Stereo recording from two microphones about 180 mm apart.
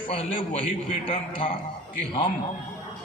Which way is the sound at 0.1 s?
30° left (ahead or behind).